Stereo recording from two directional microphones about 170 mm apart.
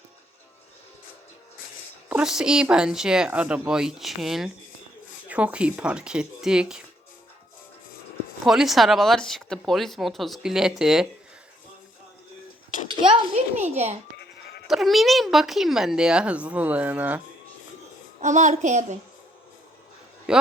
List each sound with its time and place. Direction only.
2.0 s speech: 5° right (ahead or behind)
8.4 s speech: centre (ahead or behind)
13.0 s a child's voice: 35° right (ahead or behind)
14.7 s speech: centre (ahead or behind)
18.2 s a woman's voice: 45° right (ahead or behind)